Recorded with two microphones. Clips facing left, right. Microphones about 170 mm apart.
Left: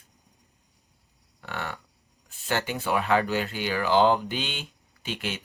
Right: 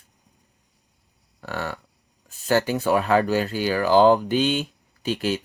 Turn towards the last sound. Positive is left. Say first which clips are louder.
# right 9 dB
turn(degrees=-35)  # may be behind; listen again after turning